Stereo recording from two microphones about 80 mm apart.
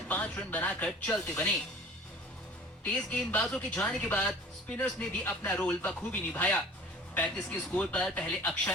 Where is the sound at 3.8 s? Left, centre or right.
Left.